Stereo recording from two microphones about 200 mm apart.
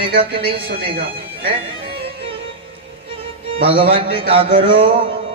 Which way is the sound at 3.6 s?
25° right (ahead or behind).